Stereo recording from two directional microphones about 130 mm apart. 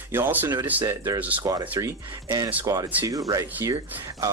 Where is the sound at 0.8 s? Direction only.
25° right (ahead or behind).